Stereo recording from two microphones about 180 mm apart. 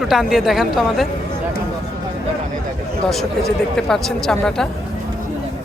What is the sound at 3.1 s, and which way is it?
A woman's voice, centre (ahead or behind).